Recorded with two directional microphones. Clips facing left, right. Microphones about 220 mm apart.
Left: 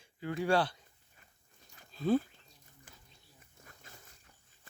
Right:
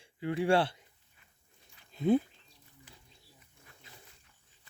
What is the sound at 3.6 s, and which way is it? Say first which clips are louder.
Dog: left 2 dB; 45° left (ahead or behind).